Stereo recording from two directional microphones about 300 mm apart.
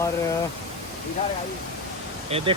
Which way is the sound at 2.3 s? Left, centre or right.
Centre.